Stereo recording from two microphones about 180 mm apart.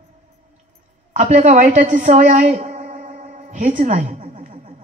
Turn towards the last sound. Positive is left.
turn(degrees=-45)  # may be behind; listen again after turning